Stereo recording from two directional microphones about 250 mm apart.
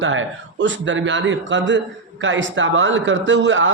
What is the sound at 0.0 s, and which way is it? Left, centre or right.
Speech, right.